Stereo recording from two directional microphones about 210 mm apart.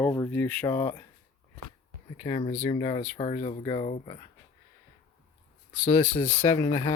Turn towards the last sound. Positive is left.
turn(degrees=15)  # may be behind; listen again after turning